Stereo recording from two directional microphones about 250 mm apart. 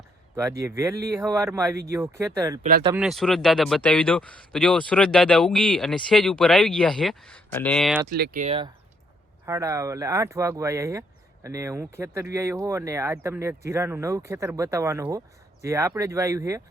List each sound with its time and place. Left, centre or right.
0.3 s a man's voice: centre
8.1 s speech: right
8.4 s speech: right